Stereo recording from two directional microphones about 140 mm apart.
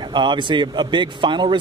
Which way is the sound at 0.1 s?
35° right (ahead or behind).